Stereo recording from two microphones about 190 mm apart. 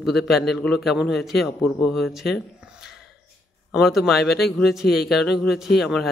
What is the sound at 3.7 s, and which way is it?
Speech, centre (ahead or behind).